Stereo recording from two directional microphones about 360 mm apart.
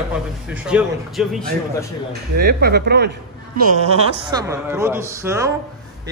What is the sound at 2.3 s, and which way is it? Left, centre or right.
Speech, right.